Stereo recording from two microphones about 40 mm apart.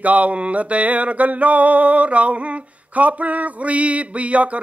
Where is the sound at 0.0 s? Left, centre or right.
Right.